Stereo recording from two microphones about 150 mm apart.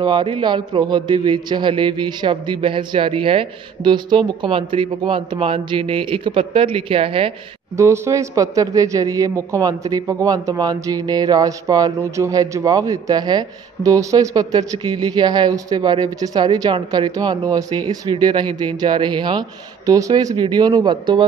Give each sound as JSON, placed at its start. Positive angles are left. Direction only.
{"t": 0.0, "sound": "a man's voice", "side_deg": -30}
{"t": 7.7, "sound": "speech", "side_deg": -20}